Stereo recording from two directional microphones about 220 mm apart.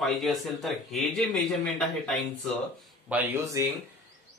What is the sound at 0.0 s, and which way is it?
Speech, centre (ahead or behind).